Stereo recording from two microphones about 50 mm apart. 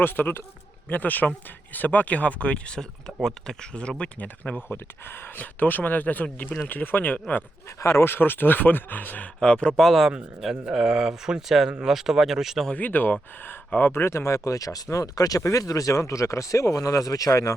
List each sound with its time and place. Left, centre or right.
0.0 s speech: left
4.2 s speech: left
7.8 s speech: left
8.0 s speech: left
9.4 s speech: left
9.7 s speech: centre
10.7 s speech: centre
12.7 s speech: left
13.9 s speech: left